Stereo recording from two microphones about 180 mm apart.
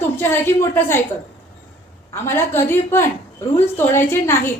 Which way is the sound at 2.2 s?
15° left (ahead or behind).